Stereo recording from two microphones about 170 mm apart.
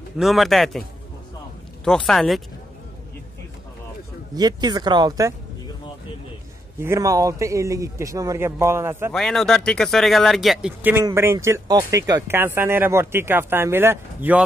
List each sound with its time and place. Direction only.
0.2 s speech: centre (ahead or behind)
1.9 s speech: 5° left (ahead or behind)
4.4 s a man's voice: 25° right (ahead or behind)
6.8 s a man's voice: 20° right (ahead or behind)
9.1 s speech: centre (ahead or behind)